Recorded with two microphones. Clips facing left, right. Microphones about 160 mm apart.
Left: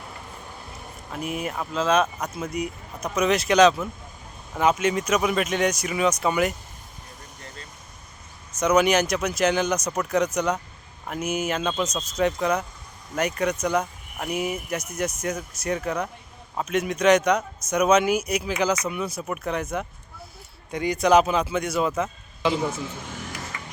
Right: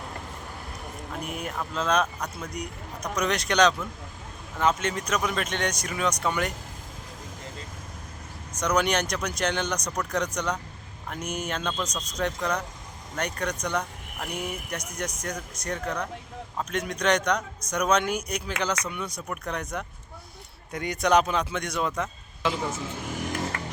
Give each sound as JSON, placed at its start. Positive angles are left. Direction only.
{"t": 1.2, "sound": "speech", "side_deg": 5}
{"t": 8.6, "sound": "speech", "side_deg": 5}
{"t": 23.5, "sound": "music", "side_deg": -60}